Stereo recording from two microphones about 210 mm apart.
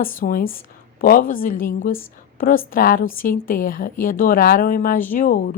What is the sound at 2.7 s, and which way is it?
A woman's voice, 45° left (ahead or behind).